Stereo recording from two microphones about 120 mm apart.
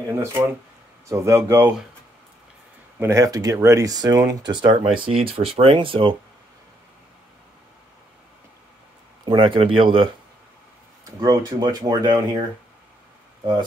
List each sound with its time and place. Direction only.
0.2 s speech: 20° right (ahead or behind)
3.0 s speech: 25° right (ahead or behind); by 6.1 s 45° right (ahead or behind)
9.2 s speech: 40° right (ahead or behind)
11.1 s speech: 35° right (ahead or behind)